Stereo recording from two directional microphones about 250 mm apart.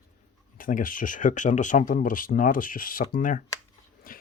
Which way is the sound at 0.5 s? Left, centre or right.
Left.